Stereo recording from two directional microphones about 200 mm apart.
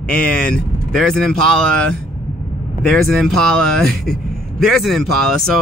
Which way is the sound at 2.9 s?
Centre (ahead or behind).